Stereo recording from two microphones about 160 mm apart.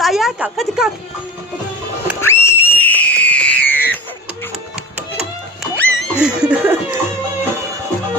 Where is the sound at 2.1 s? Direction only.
15° left (ahead or behind).